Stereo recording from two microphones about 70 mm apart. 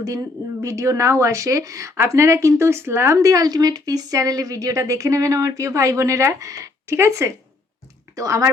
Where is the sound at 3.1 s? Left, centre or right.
Right.